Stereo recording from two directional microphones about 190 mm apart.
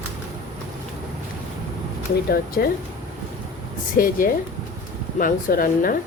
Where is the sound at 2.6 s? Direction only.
55° left (ahead or behind).